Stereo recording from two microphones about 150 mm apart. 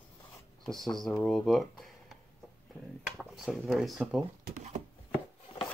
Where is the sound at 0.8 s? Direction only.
Centre (ahead or behind).